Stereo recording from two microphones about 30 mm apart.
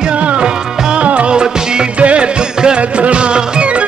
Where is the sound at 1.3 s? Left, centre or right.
Right.